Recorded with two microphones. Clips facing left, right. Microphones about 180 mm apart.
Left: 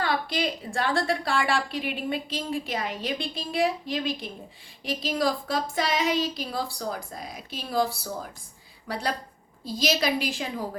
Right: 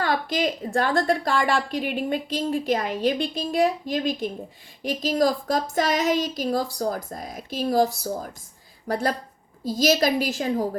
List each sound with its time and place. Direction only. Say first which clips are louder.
0.0 s a woman's voice: right 3 dB; 45° right (ahead or behind)
8.9 s a woman's voice: right 5 dB; 45° right (ahead or behind)